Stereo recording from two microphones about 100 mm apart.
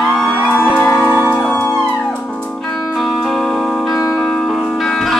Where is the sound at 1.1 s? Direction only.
20° right (ahead or behind).